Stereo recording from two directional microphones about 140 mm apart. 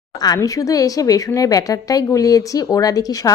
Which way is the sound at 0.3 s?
25° left (ahead or behind).